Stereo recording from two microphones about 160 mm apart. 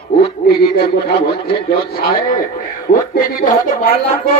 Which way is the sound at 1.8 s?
70° left (ahead or behind).